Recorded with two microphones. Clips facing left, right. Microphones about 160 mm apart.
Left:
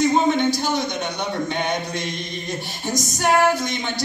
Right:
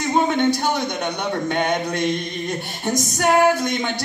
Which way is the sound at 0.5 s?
60° right (ahead or behind).